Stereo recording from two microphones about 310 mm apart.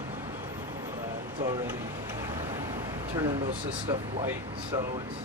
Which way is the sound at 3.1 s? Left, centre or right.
Centre.